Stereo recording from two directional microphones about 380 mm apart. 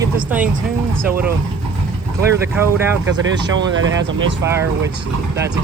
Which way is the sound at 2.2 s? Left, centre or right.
Centre.